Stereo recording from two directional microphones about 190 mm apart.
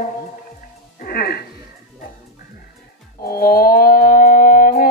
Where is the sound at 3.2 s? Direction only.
50° left (ahead or behind).